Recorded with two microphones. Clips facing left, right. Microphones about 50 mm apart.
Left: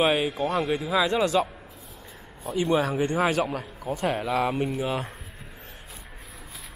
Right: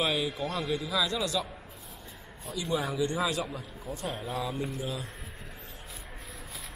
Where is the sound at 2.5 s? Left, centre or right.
Left.